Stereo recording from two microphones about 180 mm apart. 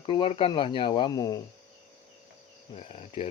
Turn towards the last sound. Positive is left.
turn(degrees=35)  # may be behind; listen again after turning